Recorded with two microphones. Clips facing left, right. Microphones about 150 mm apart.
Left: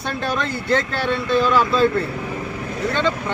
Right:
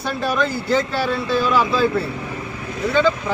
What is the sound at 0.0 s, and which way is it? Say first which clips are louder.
Speech: right 3 dB; centre (ahead or behind).